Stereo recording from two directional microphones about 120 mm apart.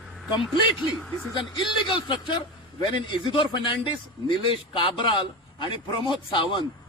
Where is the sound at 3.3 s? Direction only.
45° left (ahead or behind).